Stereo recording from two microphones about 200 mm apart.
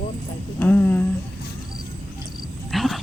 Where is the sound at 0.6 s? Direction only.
10° left (ahead or behind).